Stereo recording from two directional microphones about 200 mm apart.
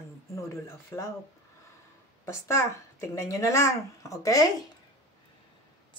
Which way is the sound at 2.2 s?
15° left (ahead or behind).